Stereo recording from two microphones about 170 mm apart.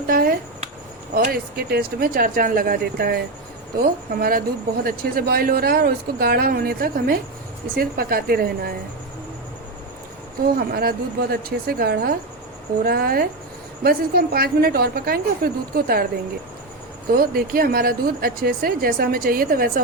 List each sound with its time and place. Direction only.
0.1 s a sound: 60° right (ahead or behind)
1.1 s speech: 60° right (ahead or behind)
10.4 s speech: 65° right (ahead or behind)
17.1 s speech: 60° right (ahead or behind)